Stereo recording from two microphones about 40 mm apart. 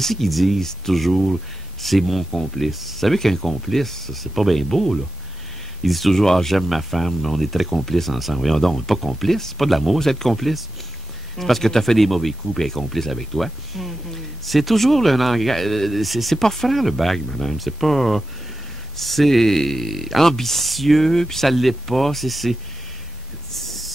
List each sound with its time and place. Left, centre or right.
0.0 s speech: centre
0.6 s speech: centre
23.5 s hiss: centre